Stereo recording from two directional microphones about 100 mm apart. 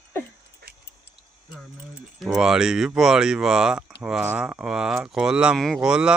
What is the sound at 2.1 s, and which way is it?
Speech, 5° right (ahead or behind).